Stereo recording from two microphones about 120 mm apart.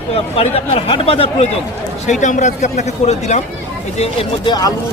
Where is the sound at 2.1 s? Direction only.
90° left; by 3.4 s 75° left (ahead or behind).